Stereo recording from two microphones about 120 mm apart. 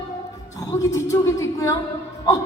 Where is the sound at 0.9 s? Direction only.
25° left (ahead or behind).